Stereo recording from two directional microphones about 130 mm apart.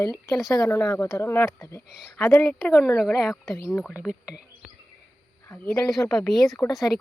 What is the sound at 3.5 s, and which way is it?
Speech, 20° left (ahead or behind).